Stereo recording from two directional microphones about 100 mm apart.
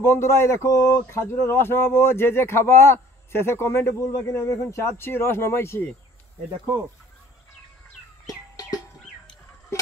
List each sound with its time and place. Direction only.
0.0 s speech: 25° left (ahead or behind)
8.5 s music: 40° left (ahead or behind)